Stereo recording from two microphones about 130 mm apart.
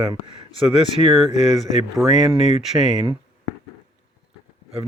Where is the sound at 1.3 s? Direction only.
60° left (ahead or behind).